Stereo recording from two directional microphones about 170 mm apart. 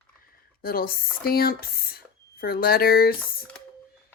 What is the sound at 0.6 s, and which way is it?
Speech, 60° left (ahead or behind).